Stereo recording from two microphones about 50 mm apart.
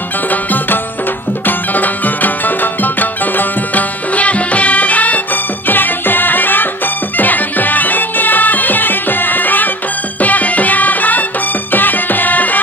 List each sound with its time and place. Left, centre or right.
0.3 s music: left